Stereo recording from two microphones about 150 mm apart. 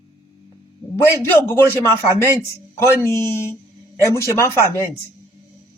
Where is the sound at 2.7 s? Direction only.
20° left (ahead or behind).